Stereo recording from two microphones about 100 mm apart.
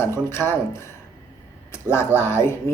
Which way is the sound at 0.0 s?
25° left (ahead or behind).